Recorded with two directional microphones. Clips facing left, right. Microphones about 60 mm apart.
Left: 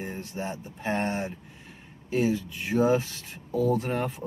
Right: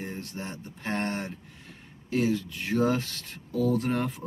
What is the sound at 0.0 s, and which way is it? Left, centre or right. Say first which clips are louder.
Speech: left 3 dB; centre.